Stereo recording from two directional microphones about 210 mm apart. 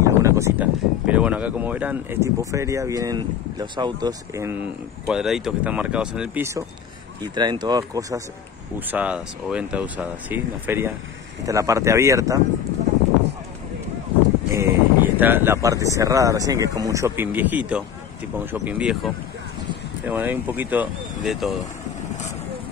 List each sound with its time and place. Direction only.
0.0 s speech: 15° right (ahead or behind)
8.7 s speech: 5° right (ahead or behind)
14.5 s speech: 10° right (ahead or behind)